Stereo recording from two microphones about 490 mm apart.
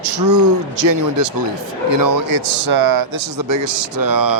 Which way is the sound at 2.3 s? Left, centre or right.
Right.